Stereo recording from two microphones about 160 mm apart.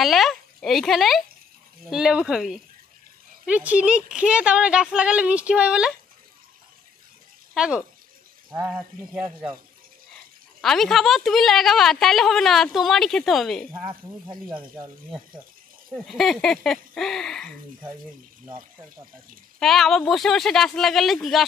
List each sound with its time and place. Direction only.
0.0 s a woman's voice: centre (ahead or behind)
7.5 s a woman's voice: 5° right (ahead or behind)
10.6 s a woman's voice: centre (ahead or behind)
13.8 s speech: 30° right (ahead or behind)
16.1 s a woman's voice: centre (ahead or behind)
19.6 s a woman's voice: centre (ahead or behind)